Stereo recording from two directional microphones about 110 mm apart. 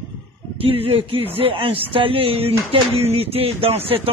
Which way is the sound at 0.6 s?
60° right (ahead or behind).